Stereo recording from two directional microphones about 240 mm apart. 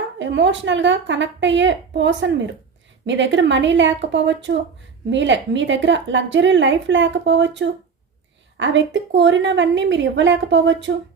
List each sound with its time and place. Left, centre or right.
0.2 s a woman's voice: right